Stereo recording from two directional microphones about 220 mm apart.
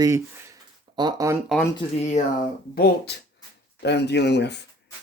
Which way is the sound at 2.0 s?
30° left (ahead or behind).